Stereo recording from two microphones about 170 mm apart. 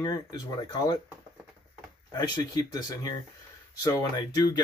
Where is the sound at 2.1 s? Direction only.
25° left (ahead or behind).